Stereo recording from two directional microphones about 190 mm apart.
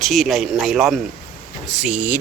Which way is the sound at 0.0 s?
Centre (ahead or behind).